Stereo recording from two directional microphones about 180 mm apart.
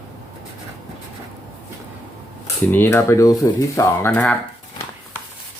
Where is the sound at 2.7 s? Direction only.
10° left (ahead or behind).